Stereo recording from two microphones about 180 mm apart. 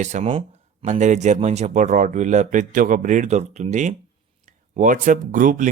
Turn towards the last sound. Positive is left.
turn(degrees=-45)  # may be behind; listen again after turning